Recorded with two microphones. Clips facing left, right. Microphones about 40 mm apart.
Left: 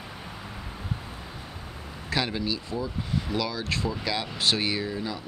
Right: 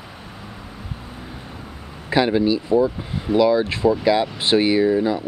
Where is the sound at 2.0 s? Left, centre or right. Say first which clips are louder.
Right 11 dB; centre.